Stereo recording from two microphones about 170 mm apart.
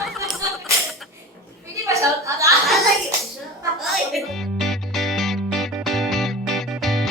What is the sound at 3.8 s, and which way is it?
Music, centre (ahead or behind).